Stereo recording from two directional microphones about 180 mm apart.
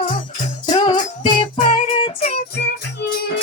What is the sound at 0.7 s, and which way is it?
Music, 25° left (ahead or behind).